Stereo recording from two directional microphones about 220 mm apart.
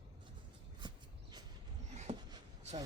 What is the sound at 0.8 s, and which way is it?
Horse, 20° right (ahead or behind).